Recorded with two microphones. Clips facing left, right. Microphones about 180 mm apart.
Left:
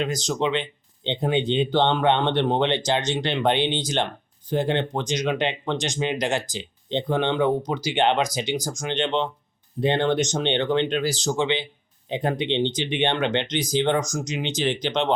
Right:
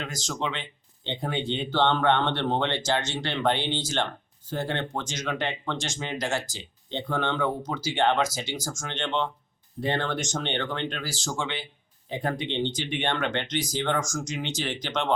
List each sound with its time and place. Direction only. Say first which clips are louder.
0.0 s speech: left 8 dB; 20° left (ahead or behind)